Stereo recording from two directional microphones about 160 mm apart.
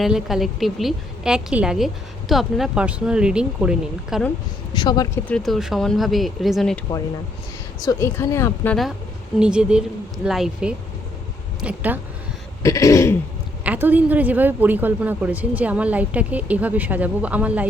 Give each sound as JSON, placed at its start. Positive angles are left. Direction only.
{"t": 0.0, "sound": "a woman's voice", "side_deg": 0}
{"t": 4.7, "sound": "throat clearing", "side_deg": 25}
{"t": 5.3, "sound": "a woman's voice", "side_deg": 0}
{"t": 7.8, "sound": "speech", "side_deg": 20}
{"t": 9.4, "sound": "a woman's voice", "side_deg": -5}
{"t": 12.6, "sound": "throat clearing", "side_deg": 20}
{"t": 13.7, "sound": "speech", "side_deg": -10}